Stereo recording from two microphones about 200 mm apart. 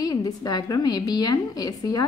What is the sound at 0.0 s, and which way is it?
A woman's voice, 20° left (ahead or behind).